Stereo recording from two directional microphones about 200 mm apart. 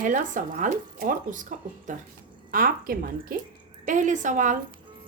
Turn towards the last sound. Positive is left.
turn(degrees=-40)  # may be behind; listen again after turning